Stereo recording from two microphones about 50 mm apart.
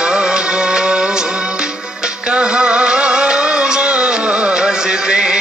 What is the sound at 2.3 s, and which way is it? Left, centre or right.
Music, right.